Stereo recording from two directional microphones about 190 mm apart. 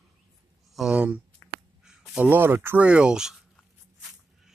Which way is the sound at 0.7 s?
5° right (ahead or behind).